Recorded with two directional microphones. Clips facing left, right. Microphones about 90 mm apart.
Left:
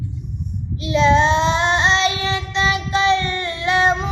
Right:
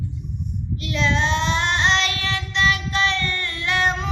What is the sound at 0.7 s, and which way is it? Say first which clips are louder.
Child singing: left 8 dB; 20° left (ahead or behind).